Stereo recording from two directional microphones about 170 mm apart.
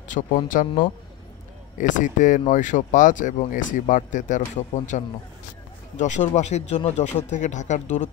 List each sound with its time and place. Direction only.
0.1 s speech: 50° left (ahead or behind)